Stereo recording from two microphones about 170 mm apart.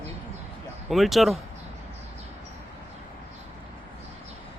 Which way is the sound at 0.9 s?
Centre (ahead or behind).